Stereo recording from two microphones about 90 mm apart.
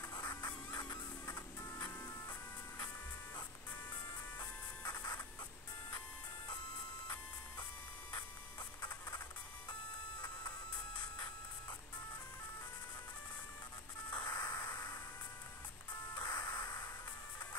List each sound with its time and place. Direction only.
0.4 s music: 45° left (ahead or behind)
4.8 s music: 45° left (ahead or behind)
14.2 s music: 45° left (ahead or behind)
16.2 s music: 45° left (ahead or behind)